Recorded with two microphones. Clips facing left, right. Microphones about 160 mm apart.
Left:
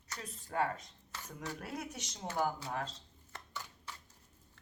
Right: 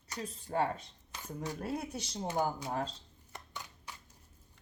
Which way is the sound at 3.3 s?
15° right (ahead or behind).